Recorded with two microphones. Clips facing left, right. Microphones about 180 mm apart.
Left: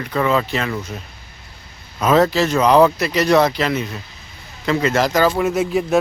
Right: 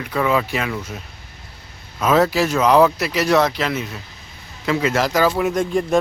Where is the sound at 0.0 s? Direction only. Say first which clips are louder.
Left 1 dB; 5° right (ahead or behind).